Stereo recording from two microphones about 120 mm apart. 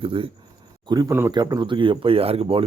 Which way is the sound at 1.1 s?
20° right (ahead or behind).